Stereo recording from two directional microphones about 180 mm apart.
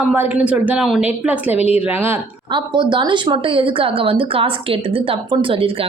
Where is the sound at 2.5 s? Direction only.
25° right (ahead or behind).